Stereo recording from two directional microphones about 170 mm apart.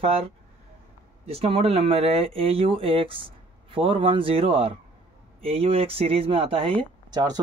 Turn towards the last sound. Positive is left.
turn(degrees=-25)  # may be behind; listen again after turning